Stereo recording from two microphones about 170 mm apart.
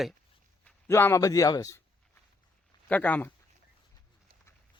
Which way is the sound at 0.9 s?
15° left (ahead or behind).